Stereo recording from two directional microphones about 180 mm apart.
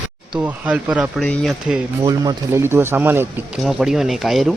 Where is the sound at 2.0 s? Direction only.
20° right (ahead or behind); by 4.5 s centre (ahead or behind).